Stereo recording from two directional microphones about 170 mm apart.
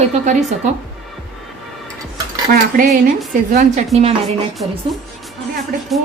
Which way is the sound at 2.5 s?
60° right (ahead or behind).